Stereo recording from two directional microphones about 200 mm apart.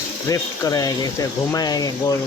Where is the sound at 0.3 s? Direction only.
20° left (ahead or behind).